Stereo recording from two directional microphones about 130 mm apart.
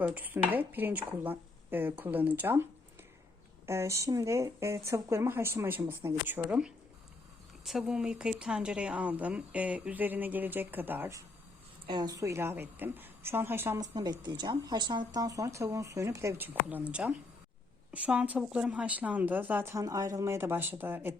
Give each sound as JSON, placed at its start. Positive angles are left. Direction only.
{"t": 0.0, "sound": "speech", "side_deg": -15}
{"t": 3.7, "sound": "speech", "side_deg": -20}
{"t": 11.9, "sound": "speech", "side_deg": -30}
{"t": 13.7, "sound": "speech", "side_deg": -30}
{"t": 16.6, "sound": "speech", "side_deg": -10}